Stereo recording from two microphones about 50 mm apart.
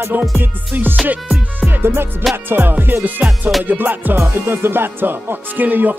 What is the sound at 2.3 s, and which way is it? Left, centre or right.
Speech, right.